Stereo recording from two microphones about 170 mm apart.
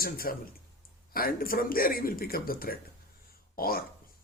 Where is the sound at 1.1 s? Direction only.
60° left (ahead or behind).